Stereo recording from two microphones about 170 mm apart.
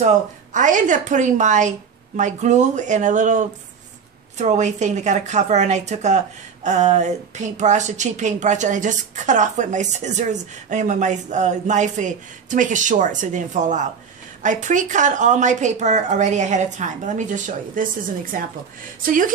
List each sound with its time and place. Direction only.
0.0 s a woman's voice: 45° right (ahead or behind)